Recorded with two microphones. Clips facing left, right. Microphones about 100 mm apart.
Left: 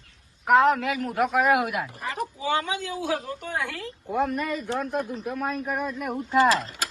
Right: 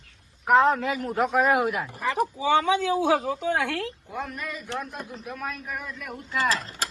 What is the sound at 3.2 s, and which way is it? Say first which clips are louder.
Speech: right 5 dB; 90° right.